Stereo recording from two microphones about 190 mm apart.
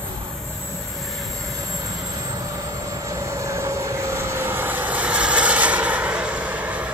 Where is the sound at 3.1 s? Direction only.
15° right (ahead or behind).